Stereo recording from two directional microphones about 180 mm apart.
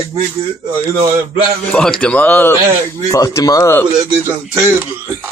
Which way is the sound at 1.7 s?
5° left (ahead or behind).